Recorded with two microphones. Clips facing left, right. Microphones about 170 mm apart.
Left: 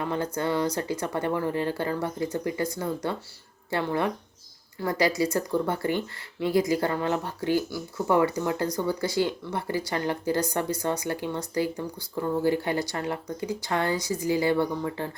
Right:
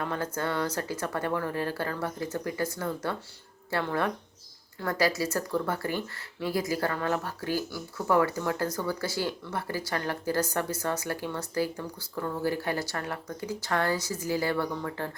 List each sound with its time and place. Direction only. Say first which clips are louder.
0.0 s speech: left 3 dB; 15° left (ahead or behind)